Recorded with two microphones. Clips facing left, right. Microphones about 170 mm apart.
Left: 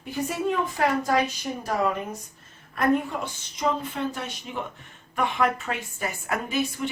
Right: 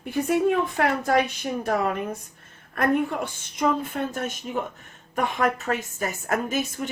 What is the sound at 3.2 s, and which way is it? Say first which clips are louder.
A woman's voice: right 3 dB; 50° right (ahead or behind).